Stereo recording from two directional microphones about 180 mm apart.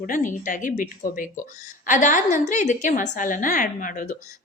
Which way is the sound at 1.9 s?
45° left (ahead or behind).